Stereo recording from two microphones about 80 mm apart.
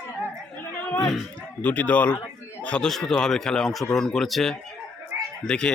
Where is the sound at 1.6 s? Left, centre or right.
Centre.